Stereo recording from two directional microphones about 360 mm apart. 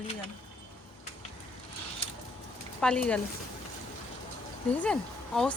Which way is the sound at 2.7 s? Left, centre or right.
Centre.